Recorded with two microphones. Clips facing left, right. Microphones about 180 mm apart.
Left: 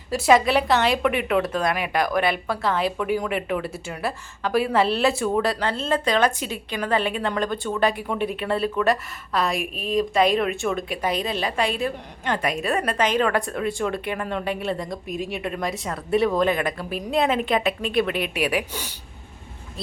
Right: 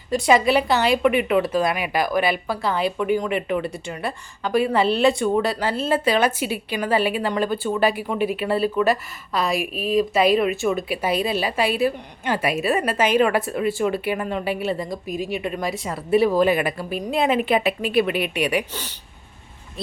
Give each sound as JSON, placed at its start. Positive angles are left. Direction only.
{"t": 0.1, "sound": "a woman's voice", "side_deg": 0}